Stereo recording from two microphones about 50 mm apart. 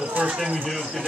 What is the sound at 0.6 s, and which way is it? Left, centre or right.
Speech, centre.